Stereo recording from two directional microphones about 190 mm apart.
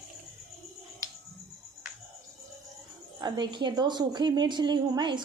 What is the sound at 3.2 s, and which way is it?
A woman's voice, 20° right (ahead or behind).